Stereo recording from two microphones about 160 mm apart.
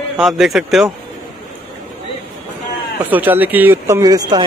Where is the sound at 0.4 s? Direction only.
Centre (ahead or behind).